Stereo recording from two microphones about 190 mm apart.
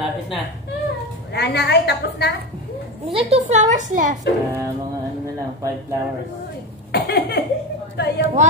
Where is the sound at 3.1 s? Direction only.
35° right (ahead or behind).